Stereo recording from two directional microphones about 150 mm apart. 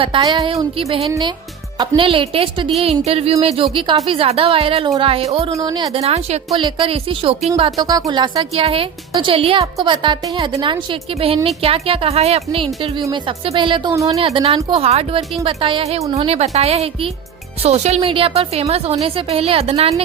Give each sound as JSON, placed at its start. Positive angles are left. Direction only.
{"t": 0.0, "sound": "a woman's voice", "side_deg": -30}
{"t": 0.8, "sound": "a woman's voice", "side_deg": -40}
{"t": 5.5, "sound": "a woman's voice", "side_deg": -25}
{"t": 5.9, "sound": "a woman's voice", "side_deg": -45}
{"t": 13.9, "sound": "a woman's voice", "side_deg": -20}
{"t": 14.2, "sound": "a woman's voice", "side_deg": -40}